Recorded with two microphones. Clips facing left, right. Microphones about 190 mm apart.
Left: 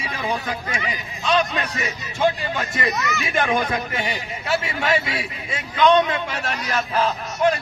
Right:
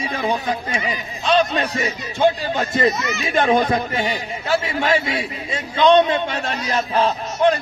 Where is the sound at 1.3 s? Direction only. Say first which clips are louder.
Right 4 dB; 30° right (ahead or behind).